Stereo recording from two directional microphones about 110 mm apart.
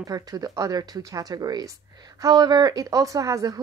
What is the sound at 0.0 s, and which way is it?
Speech, 35° right (ahead or behind).